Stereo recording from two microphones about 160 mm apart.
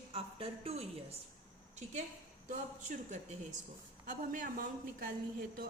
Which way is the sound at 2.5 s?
50° right (ahead or behind).